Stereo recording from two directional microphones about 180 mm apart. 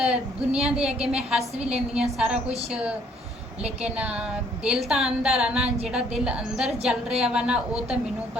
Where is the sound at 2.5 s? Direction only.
35° right (ahead or behind).